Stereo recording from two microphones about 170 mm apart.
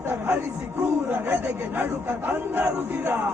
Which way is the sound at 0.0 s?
10° right (ahead or behind).